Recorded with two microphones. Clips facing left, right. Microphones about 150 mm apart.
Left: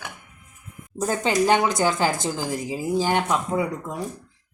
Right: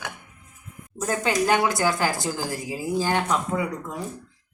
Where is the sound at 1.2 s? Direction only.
25° left (ahead or behind).